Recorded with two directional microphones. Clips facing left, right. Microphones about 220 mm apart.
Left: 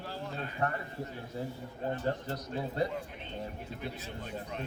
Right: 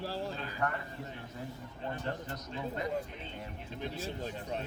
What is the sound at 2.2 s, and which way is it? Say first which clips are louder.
Speech: left 3 dB; 35° left (ahead or behind).